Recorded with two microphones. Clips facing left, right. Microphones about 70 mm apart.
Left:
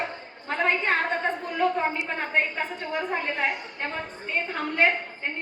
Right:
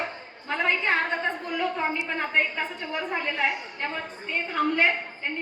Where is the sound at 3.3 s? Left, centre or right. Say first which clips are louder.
Right 1 dB; left.